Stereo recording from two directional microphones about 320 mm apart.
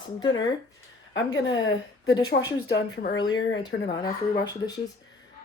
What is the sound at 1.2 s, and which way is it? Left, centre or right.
Speech, left.